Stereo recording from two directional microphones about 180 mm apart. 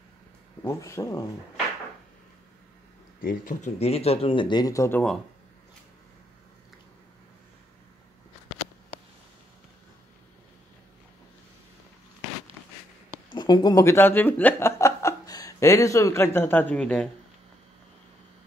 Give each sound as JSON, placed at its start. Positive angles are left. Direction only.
{"t": 0.7, "sound": "speech", "side_deg": 15}
{"t": 3.2, "sound": "speech", "side_deg": 50}
{"t": 3.8, "sound": "speech", "side_deg": 35}
{"t": 13.3, "sound": "speech", "side_deg": 25}